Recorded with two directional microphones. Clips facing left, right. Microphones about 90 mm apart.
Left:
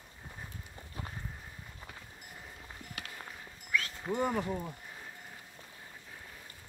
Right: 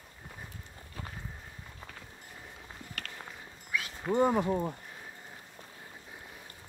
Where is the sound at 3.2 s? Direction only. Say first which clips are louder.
Right 1 dB; 10° right (ahead or behind).